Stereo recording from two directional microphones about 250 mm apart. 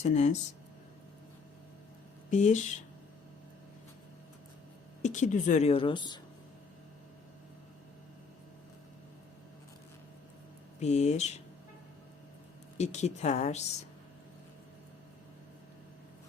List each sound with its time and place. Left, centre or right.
0.0 s speech: left
2.3 s speech: left
5.0 s speech: left
10.8 s speech: left
12.7 s speech: left